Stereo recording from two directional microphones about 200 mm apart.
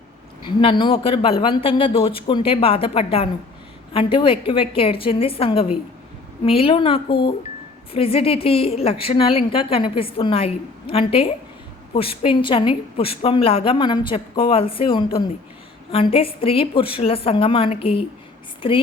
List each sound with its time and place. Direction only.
0.4 s a woman's voice: 25° left (ahead or behind)